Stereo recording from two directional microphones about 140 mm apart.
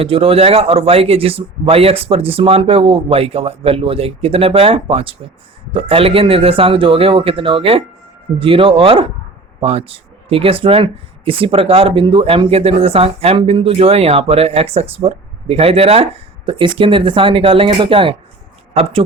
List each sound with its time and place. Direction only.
0.0 s a man's voice: 40° right (ahead or behind)